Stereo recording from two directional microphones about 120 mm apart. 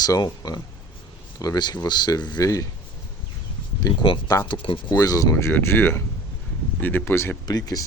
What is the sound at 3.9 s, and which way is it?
Speech, 30° left (ahead or behind).